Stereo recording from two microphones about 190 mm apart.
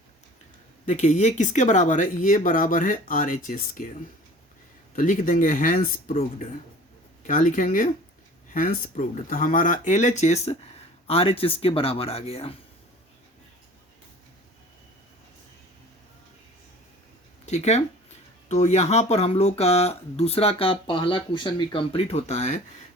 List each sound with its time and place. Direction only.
0.9 s speech: 40° left (ahead or behind)
4.9 s speech: 45° left (ahead or behind)
17.4 s speech: 35° left (ahead or behind)